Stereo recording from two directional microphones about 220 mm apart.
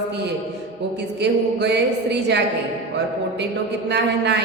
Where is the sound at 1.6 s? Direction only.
50° right (ahead or behind).